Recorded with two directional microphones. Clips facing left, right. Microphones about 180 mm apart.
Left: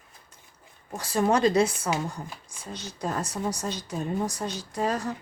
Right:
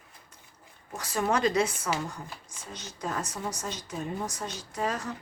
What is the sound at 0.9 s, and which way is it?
A woman's voice, 30° left (ahead or behind).